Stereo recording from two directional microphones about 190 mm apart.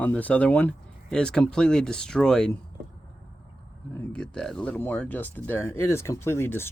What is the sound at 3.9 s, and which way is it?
Speech, 5° left (ahead or behind).